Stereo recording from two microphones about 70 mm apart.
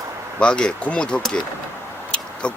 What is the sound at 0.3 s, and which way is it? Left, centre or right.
Speech, centre.